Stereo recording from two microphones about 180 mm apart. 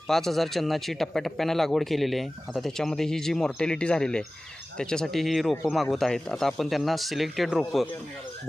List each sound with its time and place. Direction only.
0.1 s a man's voice: centre (ahead or behind)